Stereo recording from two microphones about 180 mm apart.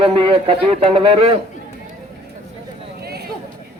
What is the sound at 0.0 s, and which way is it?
Speech, 30° right (ahead or behind).